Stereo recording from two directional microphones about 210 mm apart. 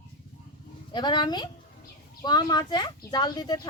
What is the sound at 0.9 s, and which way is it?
Speech, 20° left (ahead or behind).